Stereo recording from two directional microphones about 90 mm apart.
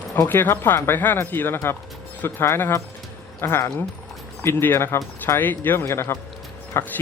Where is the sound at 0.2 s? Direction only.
25° left (ahead or behind).